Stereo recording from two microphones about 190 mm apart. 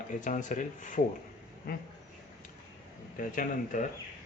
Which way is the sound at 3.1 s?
45° left (ahead or behind).